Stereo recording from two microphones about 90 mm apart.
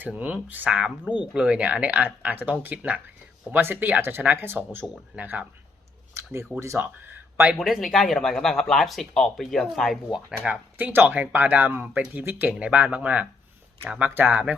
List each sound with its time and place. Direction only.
0.0 s speech: 20° right (ahead or behind)
6.2 s a sound: 30° right (ahead or behind)
6.6 s speech: 30° right (ahead or behind)
7.6 s speech: centre (ahead or behind)
10.4 s speech: 15° right (ahead or behind)